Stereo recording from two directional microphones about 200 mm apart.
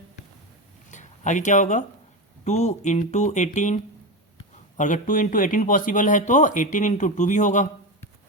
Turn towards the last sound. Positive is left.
turn(degrees=40)  # may be behind; listen again after turning